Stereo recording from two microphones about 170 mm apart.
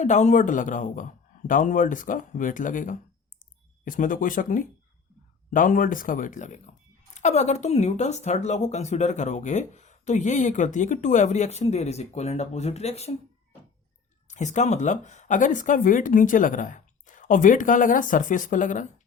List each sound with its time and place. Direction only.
0.0 s speech: 45° left (ahead or behind)
14.3 s speech: 45° left (ahead or behind)